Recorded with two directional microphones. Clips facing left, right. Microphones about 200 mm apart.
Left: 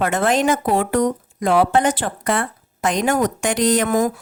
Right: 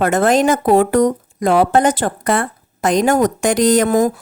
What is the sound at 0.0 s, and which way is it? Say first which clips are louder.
A woman's voice: right 4 dB; 40° right (ahead or behind).